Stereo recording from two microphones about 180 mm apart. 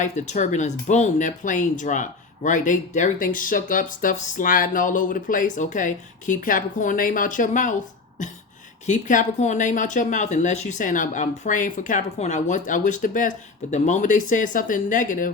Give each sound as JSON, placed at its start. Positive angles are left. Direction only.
{"t": 0.0, "sound": "speech", "side_deg": 40}